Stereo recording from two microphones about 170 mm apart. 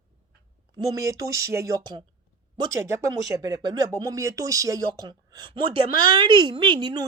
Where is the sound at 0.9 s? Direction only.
20° right (ahead or behind).